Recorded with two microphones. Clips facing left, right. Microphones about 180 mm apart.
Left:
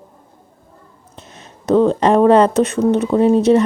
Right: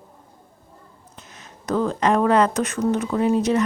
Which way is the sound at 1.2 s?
30° left (ahead or behind).